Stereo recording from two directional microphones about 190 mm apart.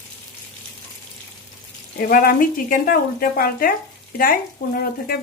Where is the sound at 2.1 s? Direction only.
50° left (ahead or behind).